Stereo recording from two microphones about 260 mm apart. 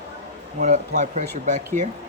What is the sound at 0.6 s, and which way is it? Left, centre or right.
Speech, right.